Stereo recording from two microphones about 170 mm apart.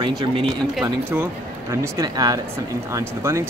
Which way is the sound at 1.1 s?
10° right (ahead or behind).